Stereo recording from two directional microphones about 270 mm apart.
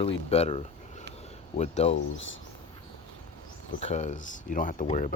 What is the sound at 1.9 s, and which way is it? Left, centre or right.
Speech, left.